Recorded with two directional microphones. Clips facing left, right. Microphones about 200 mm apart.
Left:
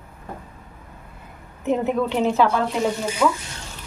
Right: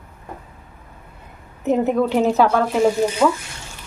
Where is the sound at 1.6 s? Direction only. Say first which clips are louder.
Right 3 dB; 40° right (ahead or behind).